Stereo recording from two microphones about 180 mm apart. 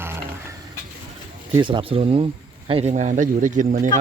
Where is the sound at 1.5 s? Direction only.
25° right (ahead or behind); by 3.8 s 45° right (ahead or behind).